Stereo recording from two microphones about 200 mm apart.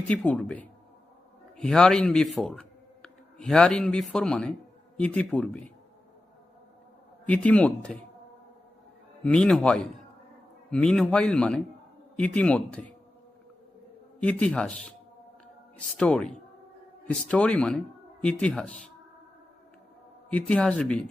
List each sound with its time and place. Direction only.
0.1 s a man's voice: 5° left (ahead or behind)
7.3 s a man's voice: 5° left (ahead or behind)
9.2 s a man's voice: 5° left (ahead or behind)
14.2 s a man's voice: 5° left (ahead or behind)
16.0 s a man's voice: 5° left (ahead or behind)
20.3 s a man's voice: 5° left (ahead or behind)